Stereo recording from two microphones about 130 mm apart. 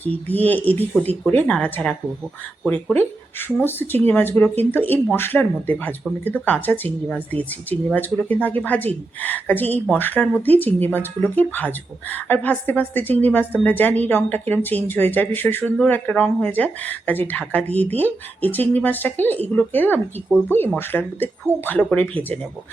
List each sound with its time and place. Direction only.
0.0 s speech: 15° left (ahead or behind)